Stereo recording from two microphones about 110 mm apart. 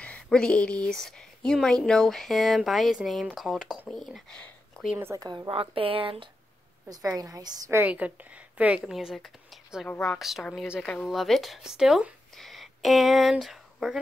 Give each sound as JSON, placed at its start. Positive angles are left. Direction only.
{"t": 0.0, "sound": "speech", "side_deg": 10}
{"t": 4.9, "sound": "a woman's voice", "side_deg": -20}
{"t": 5.2, "sound": "a woman's voice", "side_deg": -35}
{"t": 5.5, "sound": "speech", "side_deg": -55}
{"t": 6.9, "sound": "a woman's voice", "side_deg": -35}
{"t": 7.8, "sound": "a woman's voice", "side_deg": -15}